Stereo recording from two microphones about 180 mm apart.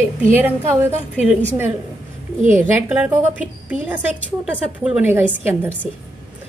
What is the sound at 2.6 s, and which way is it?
A woman's voice, 10° right (ahead or behind).